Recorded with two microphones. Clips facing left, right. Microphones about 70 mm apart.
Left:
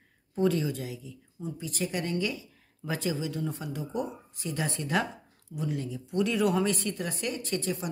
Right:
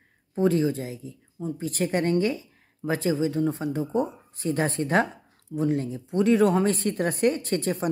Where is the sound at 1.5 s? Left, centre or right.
Right.